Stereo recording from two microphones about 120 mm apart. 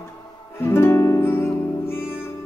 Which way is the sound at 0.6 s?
25° left (ahead or behind).